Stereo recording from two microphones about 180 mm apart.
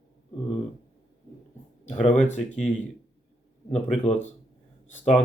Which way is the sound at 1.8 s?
40° left (ahead or behind).